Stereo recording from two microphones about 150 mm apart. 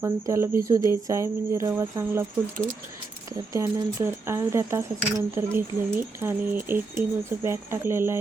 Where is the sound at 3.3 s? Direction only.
20° right (ahead or behind).